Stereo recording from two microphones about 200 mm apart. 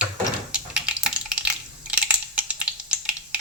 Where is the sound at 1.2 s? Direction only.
5° right (ahead or behind).